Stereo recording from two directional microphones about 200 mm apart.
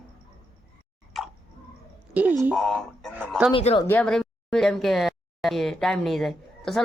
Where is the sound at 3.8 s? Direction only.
10° left (ahead or behind).